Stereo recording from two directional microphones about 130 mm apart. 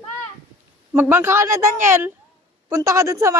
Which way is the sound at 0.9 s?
15° right (ahead or behind).